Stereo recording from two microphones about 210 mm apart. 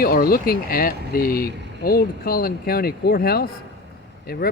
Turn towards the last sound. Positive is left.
turn(degrees=45)  # may be behind; listen again after turning